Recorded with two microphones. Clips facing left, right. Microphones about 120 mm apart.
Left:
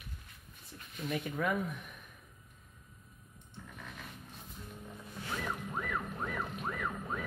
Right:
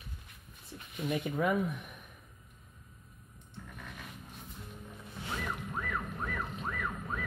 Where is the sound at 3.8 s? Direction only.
Centre (ahead or behind).